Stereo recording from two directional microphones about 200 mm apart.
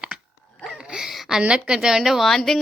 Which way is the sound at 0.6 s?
5° right (ahead or behind).